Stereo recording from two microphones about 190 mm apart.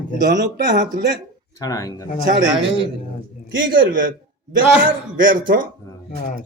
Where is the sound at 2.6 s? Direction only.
30° right (ahead or behind).